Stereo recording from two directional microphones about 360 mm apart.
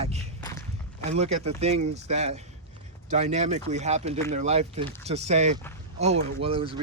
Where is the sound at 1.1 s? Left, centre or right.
Centre.